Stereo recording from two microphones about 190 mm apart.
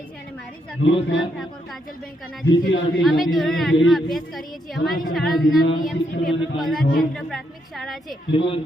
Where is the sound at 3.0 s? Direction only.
Centre (ahead or behind).